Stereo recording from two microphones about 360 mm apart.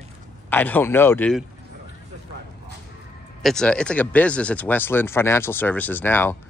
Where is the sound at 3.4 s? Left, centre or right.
Centre.